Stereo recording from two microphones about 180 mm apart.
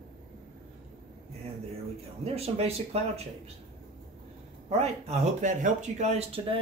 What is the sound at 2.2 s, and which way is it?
Speech, 35° right (ahead or behind).